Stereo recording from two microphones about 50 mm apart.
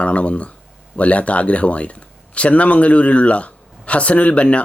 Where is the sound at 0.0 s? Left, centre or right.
Left.